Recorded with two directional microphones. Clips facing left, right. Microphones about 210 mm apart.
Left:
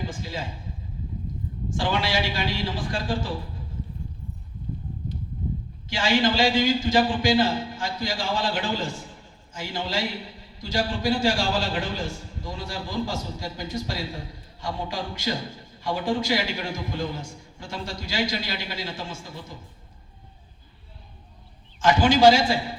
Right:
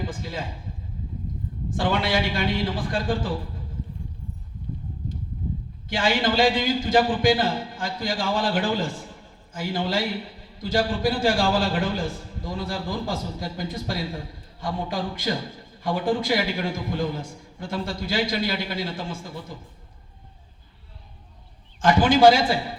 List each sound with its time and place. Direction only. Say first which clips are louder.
0.0 s a man's voice: right 1 dB; 55° right (ahead or behind)
1.7 s a man's voice: right 2 dB; 55° right (ahead or behind)
5.9 s a man's voice: even; 55° right (ahead or behind)
21.8 s a man's voice: right 1 dB; 55° right (ahead or behind)